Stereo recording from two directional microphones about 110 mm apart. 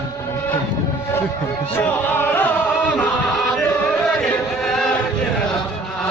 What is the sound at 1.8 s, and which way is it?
Music, 15° left (ahead or behind).